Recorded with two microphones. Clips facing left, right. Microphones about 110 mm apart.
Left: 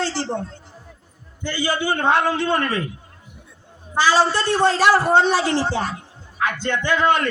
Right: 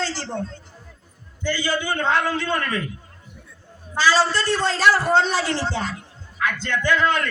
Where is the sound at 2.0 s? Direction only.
20° left (ahead or behind).